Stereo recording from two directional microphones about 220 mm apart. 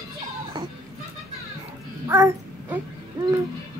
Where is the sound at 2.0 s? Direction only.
15° right (ahead or behind).